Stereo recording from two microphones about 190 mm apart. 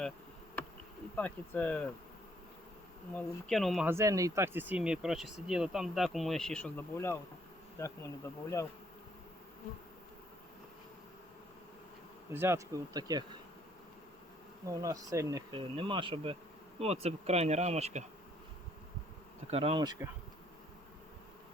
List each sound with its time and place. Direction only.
1.1 s bee: 10° left (ahead or behind)
3.2 s speech: centre (ahead or behind)
3.8 s speech: 15° right (ahead or behind); by 7.2 s 10° left (ahead or behind)
7.8 s bee: 15° left (ahead or behind)
12.3 s speech: 15° right (ahead or behind)
14.7 s speech: 20° right (ahead or behind); by 18.0 s 35° right (ahead or behind)
19.5 s speech: 30° right (ahead or behind)